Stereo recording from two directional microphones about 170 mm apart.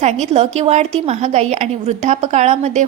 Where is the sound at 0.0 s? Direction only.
40° right (ahead or behind).